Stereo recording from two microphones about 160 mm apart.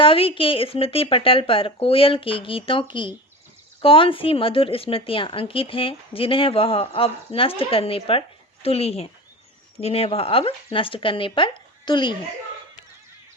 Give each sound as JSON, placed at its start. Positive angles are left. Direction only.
{"t": 0.0, "sound": "speech", "side_deg": 35}